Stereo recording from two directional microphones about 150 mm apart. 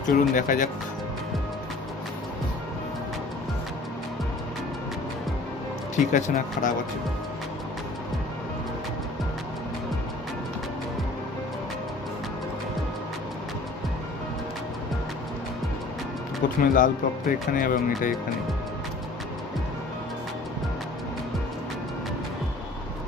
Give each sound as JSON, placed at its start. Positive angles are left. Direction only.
{"t": 0.1, "sound": "speech", "side_deg": 60}
{"t": 5.9, "sound": "speech", "side_deg": 55}
{"t": 16.7, "sound": "speech", "side_deg": 60}